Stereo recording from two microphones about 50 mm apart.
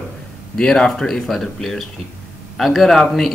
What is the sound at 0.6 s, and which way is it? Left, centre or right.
Speech, centre.